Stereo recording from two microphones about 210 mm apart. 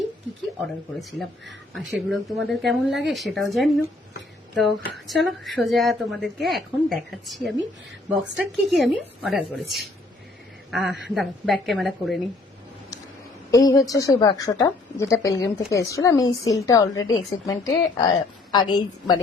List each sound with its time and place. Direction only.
1.2 s speech: centre (ahead or behind)
8.7 s speech: centre (ahead or behind)
13.5 s a woman's voice: 15° left (ahead or behind)